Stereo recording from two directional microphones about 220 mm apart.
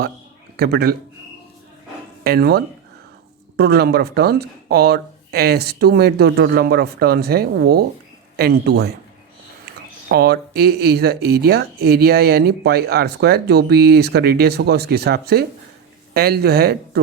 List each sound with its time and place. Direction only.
0.5 s speech: 45° right (ahead or behind)
2.2 s speech: 45° right (ahead or behind)
10.1 s speech: 45° right (ahead or behind)